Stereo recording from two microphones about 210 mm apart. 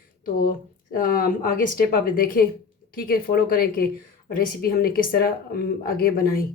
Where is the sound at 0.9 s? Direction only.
45° left (ahead or behind).